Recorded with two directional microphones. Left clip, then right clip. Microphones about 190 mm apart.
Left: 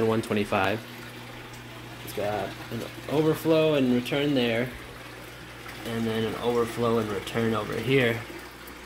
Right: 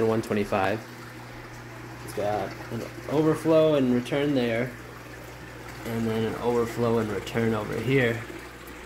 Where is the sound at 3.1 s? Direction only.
5° left (ahead or behind).